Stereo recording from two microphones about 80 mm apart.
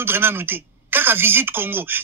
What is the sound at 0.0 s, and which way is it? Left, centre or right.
Speech, right.